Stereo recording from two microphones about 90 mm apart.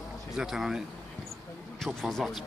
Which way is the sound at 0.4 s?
5° right (ahead or behind).